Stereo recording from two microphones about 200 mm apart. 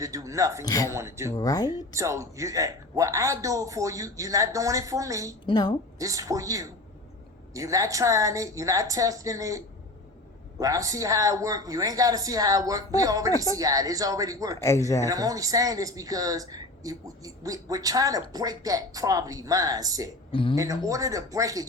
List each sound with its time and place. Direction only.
0.0 s speech: 15° right (ahead or behind)
0.6 s speech: 15° left (ahead or behind)
0.9 s speech: 15° right (ahead or behind)
1.3 s speech: 20° left (ahead or behind)
1.9 s speech: 15° right (ahead or behind)
5.5 s speech: 20° left (ahead or behind)
6.0 s speech: 15° right (ahead or behind)
14.6 s speech: 15° left (ahead or behind)
15.0 s speech: 15° right (ahead or behind)
20.3 s speech: 25° left (ahead or behind)
20.6 s speech: 15° right (ahead or behind)